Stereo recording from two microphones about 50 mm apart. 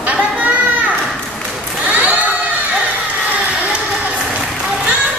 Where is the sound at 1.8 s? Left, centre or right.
Right.